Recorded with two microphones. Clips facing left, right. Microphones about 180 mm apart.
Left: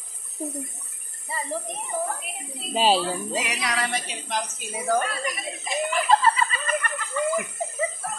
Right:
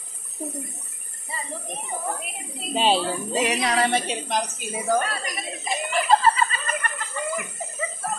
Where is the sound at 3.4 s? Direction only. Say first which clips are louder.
Right 7 dB; 30° right (ahead or behind).